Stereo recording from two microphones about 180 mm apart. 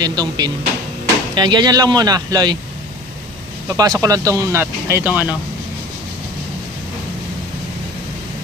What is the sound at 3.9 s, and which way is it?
Speech, 20° right (ahead or behind).